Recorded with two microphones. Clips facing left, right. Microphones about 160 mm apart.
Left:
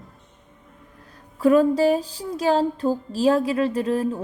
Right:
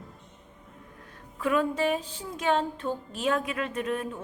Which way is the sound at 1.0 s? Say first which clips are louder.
Left 11 dB; 35° left (ahead or behind).